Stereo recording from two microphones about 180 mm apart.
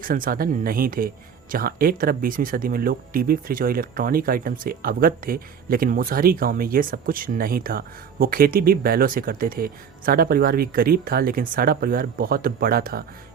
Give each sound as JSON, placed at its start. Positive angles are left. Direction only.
{"t": 0.0, "sound": "speech", "side_deg": -50}